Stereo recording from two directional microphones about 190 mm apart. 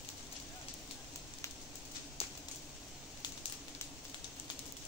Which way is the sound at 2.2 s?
30° left (ahead or behind).